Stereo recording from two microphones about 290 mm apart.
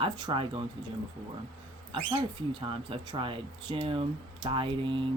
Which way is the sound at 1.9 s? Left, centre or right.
Centre.